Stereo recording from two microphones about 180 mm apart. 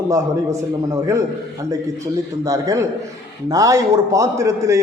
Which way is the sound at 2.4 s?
20° right (ahead or behind).